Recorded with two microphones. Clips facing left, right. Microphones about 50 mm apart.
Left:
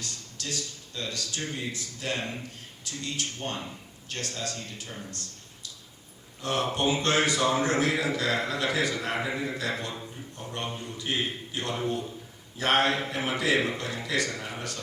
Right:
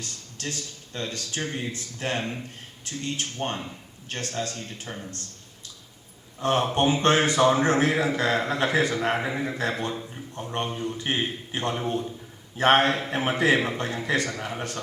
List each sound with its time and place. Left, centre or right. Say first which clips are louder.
0.0 s a man's voice: right 3 dB; right
6.4 s a man's voice: right 5 dB; right